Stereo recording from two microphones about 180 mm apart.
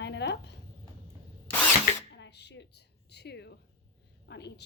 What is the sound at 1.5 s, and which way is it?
Drill, 10° left (ahead or behind).